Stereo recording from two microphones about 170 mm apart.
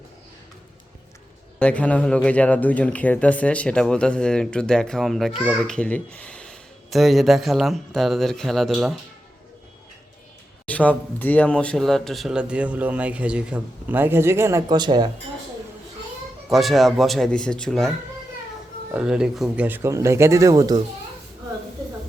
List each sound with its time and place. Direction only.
1.5 s speech: 10° left (ahead or behind)
10.7 s speech: 10° left (ahead or behind); by 15.1 s 25° right (ahead or behind)
16.5 s speech: centre (ahead or behind)
18.9 s speech: 5° right (ahead or behind); by 20.8 s 20° right (ahead or behind)